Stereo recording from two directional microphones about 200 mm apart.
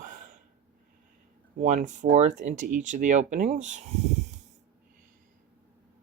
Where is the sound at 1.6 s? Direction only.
35° right (ahead or behind).